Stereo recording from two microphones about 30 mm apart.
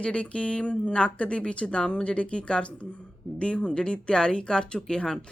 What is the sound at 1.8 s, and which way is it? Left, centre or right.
Speech, left.